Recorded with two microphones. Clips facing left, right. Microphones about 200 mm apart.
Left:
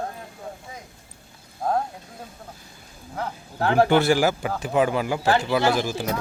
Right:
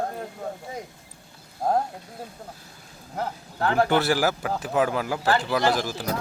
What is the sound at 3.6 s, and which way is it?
Speech, 35° left (ahead or behind).